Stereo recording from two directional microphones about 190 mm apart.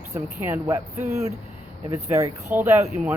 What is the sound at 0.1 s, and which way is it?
A man's voice, 15° right (ahead or behind).